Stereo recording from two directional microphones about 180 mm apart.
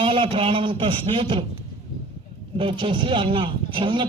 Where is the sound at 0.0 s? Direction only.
30° right (ahead or behind).